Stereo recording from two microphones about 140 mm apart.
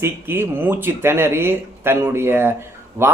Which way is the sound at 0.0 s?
15° right (ahead or behind).